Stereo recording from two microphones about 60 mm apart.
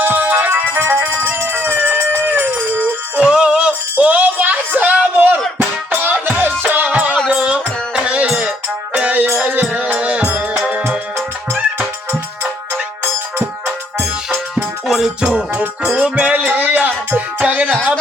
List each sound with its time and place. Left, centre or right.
0.0 s music: right
1.5 s a sound: right
2.4 s music: right
3.2 s music: centre
13.7 s music: centre